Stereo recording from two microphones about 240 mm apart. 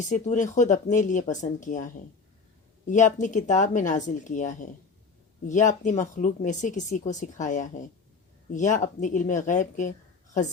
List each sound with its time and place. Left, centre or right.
0.1 s speech: left